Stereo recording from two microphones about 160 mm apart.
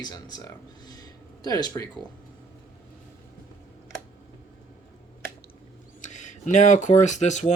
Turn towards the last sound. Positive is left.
turn(degrees=45)  # may be behind; listen again after turning